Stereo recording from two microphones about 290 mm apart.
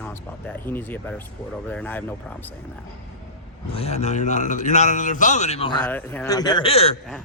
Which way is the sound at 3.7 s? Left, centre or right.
Left.